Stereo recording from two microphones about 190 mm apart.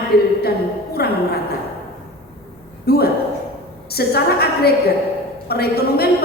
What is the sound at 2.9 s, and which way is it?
A woman's voice, 55° left (ahead or behind).